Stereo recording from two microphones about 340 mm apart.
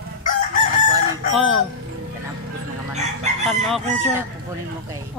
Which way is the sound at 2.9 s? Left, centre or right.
Centre.